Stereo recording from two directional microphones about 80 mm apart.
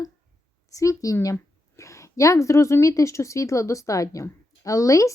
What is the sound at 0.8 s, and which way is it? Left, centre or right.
A woman's voice, left.